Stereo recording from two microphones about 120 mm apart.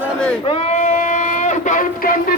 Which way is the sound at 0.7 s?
90° left.